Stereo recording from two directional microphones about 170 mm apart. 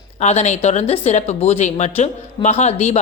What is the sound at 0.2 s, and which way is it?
Speech, 40° left (ahead or behind).